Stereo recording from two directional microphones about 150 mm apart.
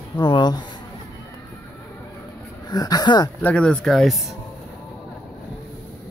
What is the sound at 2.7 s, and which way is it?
Speech, 25° left (ahead or behind).